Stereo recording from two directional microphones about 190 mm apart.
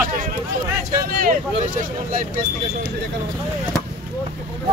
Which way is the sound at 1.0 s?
50° right (ahead or behind).